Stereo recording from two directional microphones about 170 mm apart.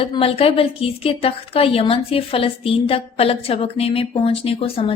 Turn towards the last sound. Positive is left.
turn(degrees=35)  # may be behind; listen again after turning